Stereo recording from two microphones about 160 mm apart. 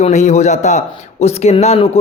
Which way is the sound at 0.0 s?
45° left (ahead or behind).